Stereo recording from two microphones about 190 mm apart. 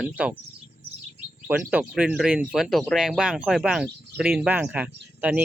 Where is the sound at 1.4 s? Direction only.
10° right (ahead or behind).